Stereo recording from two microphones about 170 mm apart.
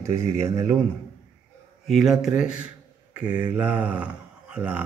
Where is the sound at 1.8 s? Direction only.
Centre (ahead or behind).